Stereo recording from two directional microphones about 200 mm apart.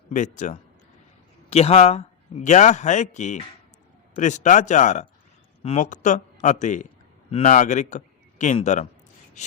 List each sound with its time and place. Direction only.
0.1 s a man's voice: 40° left (ahead or behind)